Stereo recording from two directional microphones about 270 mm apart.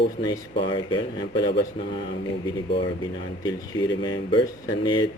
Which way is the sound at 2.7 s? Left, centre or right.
Centre.